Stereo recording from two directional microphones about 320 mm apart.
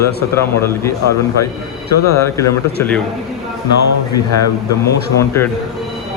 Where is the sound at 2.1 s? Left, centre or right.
Centre.